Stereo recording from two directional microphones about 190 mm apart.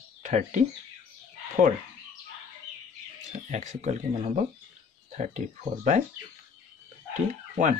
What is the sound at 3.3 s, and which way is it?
Speech, 40° right (ahead or behind).